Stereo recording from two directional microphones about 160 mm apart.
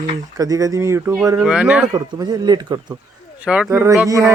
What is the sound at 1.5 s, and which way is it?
Speech, 5° right (ahead or behind).